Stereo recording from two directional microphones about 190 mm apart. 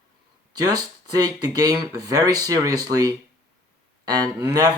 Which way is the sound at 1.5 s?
20° right (ahead or behind).